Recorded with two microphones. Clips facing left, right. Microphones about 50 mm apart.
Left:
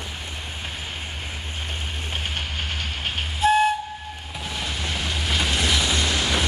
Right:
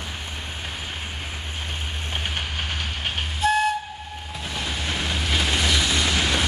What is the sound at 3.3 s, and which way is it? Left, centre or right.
Train, centre.